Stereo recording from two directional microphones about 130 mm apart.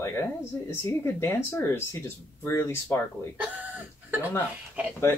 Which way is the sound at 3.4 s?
15° right (ahead or behind).